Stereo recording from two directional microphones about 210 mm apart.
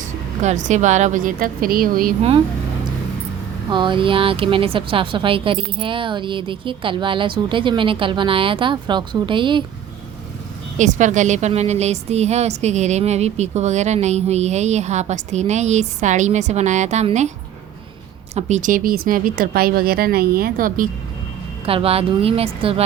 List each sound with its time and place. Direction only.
0.4 s a woman's voice: 35° right (ahead or behind)
3.7 s speech: 20° right (ahead or behind)
10.8 s a woman's voice: 35° right (ahead or behind)
18.3 s speech: 35° right (ahead or behind)
21.7 s speech: 25° right (ahead or behind)